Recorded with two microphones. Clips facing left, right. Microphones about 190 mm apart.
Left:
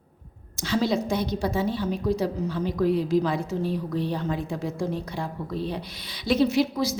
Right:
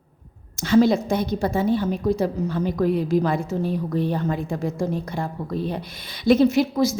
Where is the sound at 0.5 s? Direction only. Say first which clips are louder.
Right 7 dB; 50° right (ahead or behind).